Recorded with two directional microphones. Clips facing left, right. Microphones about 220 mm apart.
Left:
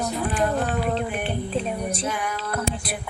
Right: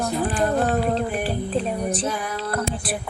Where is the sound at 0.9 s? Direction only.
35° right (ahead or behind).